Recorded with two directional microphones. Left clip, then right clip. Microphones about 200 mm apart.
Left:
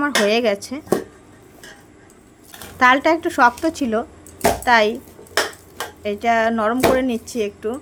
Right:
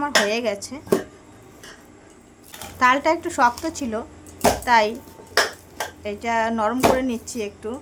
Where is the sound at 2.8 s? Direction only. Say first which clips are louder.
Left 4 dB; 15° left (ahead or behind).